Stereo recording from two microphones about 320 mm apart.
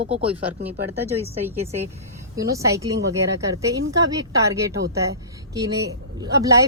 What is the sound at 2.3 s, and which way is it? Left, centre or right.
Speech, centre.